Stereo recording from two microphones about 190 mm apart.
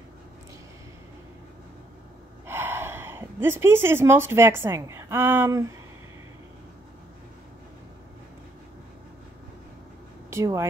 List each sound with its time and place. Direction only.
2.4 s a woman's voice: 10° right (ahead or behind)
10.3 s speech: 15° right (ahead or behind)